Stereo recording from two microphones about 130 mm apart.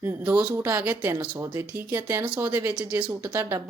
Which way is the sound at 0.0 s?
10° right (ahead or behind).